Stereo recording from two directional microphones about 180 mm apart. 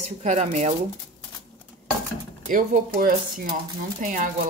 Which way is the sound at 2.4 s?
50° right (ahead or behind).